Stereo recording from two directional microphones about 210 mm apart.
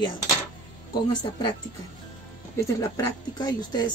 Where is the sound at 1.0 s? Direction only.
20° left (ahead or behind).